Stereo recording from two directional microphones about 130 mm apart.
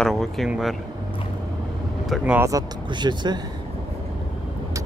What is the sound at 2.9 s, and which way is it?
Speech, 35° right (ahead or behind).